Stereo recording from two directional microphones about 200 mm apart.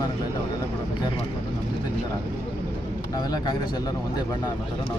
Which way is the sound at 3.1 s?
20° left (ahead or behind).